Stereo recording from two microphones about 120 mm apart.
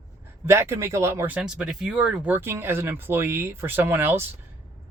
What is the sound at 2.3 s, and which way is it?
Speech, 20° right (ahead or behind).